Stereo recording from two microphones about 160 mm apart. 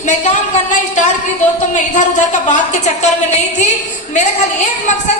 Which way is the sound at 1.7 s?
50° left (ahead or behind).